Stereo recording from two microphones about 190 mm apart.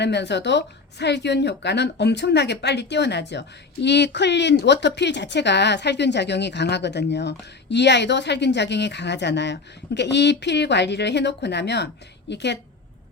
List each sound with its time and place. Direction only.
0.0 s a woman's voice: 65° left (ahead or behind)